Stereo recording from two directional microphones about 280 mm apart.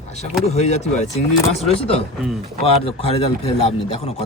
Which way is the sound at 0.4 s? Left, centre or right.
Left.